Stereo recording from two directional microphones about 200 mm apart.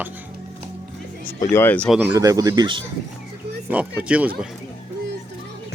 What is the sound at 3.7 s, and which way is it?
Speech, 5° right (ahead or behind).